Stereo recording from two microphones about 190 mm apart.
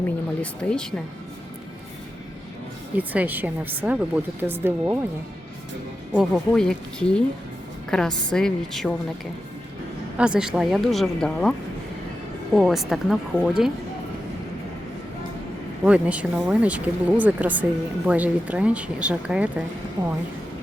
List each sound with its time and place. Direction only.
0.6 s speech: 5° left (ahead or behind)
3.0 s speech: 10° right (ahead or behind)
6.1 s speech: centre (ahead or behind)
10.2 s speech: 5° right (ahead or behind)
12.5 s speech: centre (ahead or behind)
15.8 s speech: 5° right (ahead or behind)
20.0 s speech: 20° right (ahead or behind)